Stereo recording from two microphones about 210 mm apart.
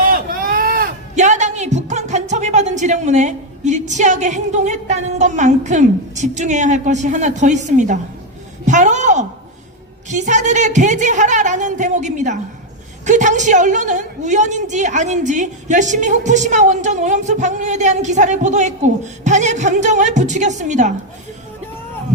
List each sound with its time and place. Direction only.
0.1 s a man's voice: 45° right (ahead or behind)
8.6 s a sound: 35° right (ahead or behind)
10.1 s a woman's voice: 35° right (ahead or behind)